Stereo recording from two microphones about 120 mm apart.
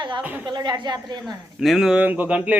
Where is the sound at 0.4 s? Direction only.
35° right (ahead or behind).